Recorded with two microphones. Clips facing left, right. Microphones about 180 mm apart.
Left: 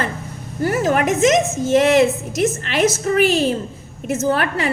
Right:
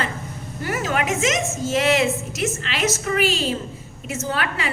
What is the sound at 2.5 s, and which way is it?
A woman's voice, 45° left (ahead or behind).